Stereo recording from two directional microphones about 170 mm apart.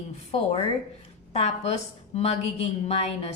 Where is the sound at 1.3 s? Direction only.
40° left (ahead or behind).